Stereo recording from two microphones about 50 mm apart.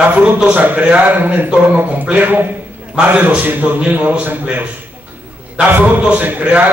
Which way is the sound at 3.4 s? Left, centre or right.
Right.